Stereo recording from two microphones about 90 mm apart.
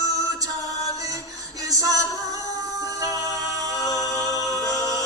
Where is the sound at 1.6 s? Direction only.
45° right (ahead or behind).